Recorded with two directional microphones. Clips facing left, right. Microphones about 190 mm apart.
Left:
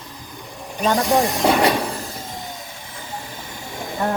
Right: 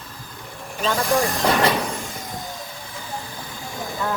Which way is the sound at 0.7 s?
15° left (ahead or behind).